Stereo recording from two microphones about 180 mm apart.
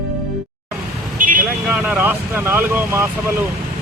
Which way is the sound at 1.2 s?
50° right (ahead or behind).